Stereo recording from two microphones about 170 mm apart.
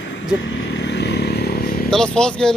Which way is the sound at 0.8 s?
85° left.